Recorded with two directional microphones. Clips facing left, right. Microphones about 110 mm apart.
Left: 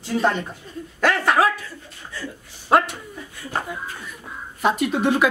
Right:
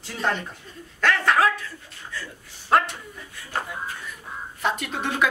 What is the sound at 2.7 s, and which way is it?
Speech, 10° left (ahead or behind).